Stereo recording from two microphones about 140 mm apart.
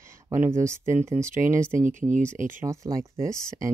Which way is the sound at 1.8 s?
65° right (ahead or behind).